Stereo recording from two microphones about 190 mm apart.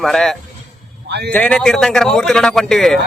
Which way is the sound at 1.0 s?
60° right (ahead or behind).